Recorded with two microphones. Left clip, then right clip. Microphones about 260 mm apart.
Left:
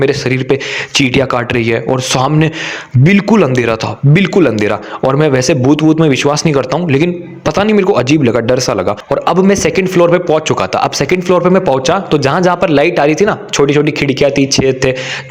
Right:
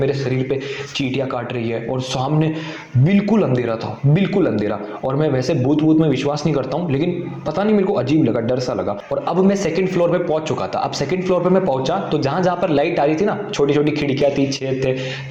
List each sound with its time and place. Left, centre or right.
0.0 s a man's voice: left